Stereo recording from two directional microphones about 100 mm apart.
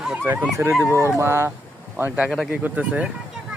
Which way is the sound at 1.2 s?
25° right (ahead or behind).